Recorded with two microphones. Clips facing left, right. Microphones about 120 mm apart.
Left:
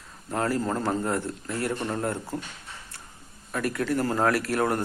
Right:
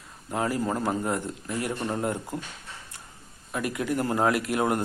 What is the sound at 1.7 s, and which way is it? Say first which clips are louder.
Speech: even; 5° right (ahead or behind).